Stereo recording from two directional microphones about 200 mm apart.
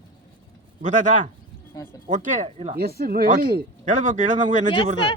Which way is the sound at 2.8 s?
50° right (ahead or behind).